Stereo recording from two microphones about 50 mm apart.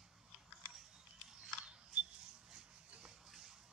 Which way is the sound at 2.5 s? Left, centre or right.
Right.